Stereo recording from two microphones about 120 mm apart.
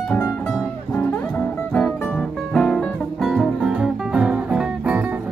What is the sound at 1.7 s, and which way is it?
Music, 5° left (ahead or behind).